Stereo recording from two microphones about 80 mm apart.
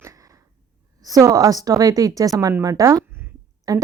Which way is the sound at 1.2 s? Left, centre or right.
Right.